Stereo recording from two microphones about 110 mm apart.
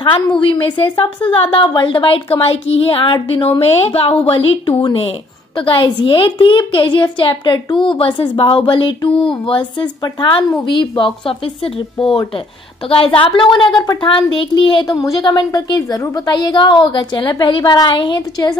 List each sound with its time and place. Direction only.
0.5 s a woman's voice: 50° left (ahead or behind)
3.6 s a woman's voice: 60° left (ahead or behind)
15.0 s a woman's voice: 35° left (ahead or behind)